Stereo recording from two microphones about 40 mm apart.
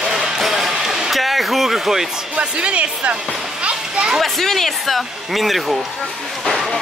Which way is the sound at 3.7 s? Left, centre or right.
Right.